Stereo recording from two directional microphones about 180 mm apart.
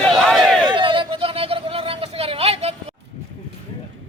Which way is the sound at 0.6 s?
25° right (ahead or behind).